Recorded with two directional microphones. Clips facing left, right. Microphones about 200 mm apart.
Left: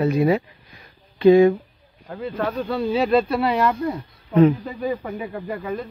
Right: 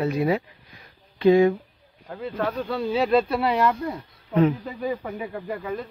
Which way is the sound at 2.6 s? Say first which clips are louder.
Left 3 dB; 10° left (ahead or behind).